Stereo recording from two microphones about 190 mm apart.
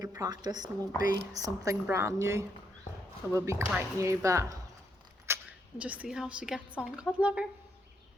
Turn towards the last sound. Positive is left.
turn(degrees=-5)  # may be behind; listen again after turning